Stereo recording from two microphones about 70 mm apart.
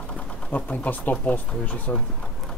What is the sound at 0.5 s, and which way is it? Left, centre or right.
Speech, left.